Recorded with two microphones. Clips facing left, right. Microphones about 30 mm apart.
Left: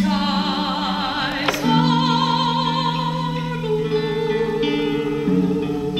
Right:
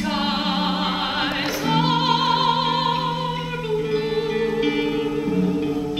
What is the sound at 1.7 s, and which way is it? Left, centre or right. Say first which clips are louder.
Music: left 2 dB; centre.